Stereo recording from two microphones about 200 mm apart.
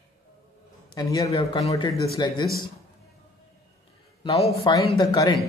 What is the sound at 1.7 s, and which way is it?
Speech, 15° left (ahead or behind).